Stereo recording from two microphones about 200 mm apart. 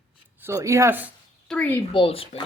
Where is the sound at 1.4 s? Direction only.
5° left (ahead or behind).